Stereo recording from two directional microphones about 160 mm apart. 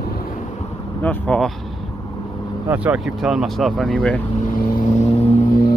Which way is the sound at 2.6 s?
10° right (ahead or behind).